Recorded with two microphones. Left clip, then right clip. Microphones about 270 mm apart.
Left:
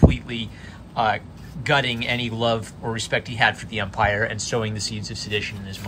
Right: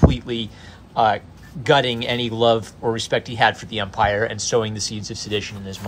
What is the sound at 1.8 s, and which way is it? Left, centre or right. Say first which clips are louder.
Speech: right 2 dB; right.